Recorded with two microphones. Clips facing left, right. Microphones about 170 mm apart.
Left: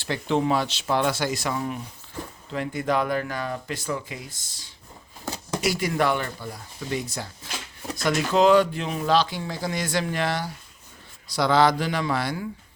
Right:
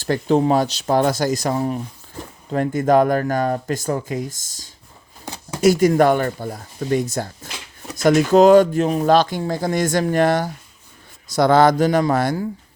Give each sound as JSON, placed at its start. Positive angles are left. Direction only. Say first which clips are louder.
{"t": 0.0, "sound": "speech", "louder": "right 7 dB", "side_deg": -40}